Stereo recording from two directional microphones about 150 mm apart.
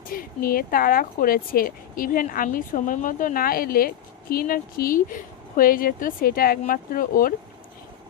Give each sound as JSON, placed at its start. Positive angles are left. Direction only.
{"t": 0.1, "sound": "speech", "side_deg": 70}